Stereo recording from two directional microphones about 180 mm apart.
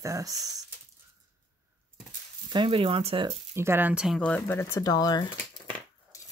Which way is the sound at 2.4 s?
25° right (ahead or behind).